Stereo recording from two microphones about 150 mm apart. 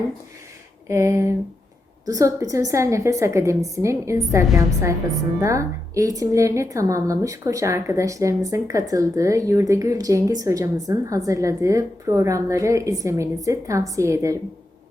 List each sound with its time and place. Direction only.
0.9 s a woman's voice: 20° right (ahead or behind)